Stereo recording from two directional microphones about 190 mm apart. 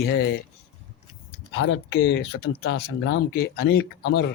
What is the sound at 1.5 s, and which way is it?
Speech, 75° left (ahead or behind).